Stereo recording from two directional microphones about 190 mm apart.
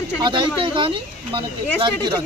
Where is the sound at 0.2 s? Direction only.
25° right (ahead or behind).